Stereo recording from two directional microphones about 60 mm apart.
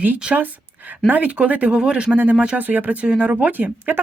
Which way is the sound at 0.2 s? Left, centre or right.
Centre.